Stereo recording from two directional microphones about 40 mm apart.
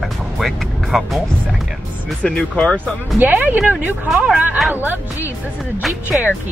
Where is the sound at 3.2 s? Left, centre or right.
Right.